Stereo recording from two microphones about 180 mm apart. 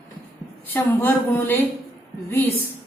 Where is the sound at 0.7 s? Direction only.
10° left (ahead or behind).